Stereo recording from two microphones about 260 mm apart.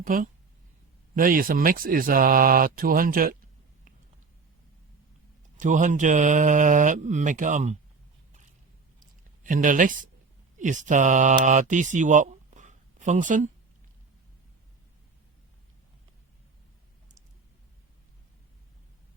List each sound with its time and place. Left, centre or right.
0.0 s speech: right
5.5 s speech: right
9.0 s a sound: right
10.6 s speech: right